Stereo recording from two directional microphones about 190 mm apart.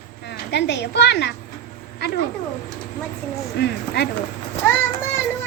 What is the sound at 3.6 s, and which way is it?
Speech, 60° left (ahead or behind).